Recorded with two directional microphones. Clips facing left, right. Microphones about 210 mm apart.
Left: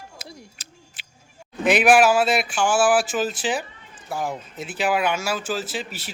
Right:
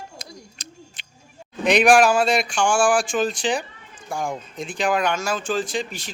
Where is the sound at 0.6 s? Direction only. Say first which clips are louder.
Right 7 dB; 5° left (ahead or behind).